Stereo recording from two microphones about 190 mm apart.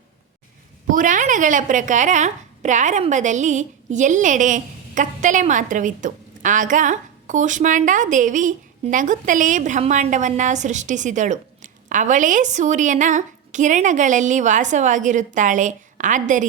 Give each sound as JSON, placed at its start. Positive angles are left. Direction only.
{"t": 0.9, "sound": "a woman's voice", "side_deg": -45}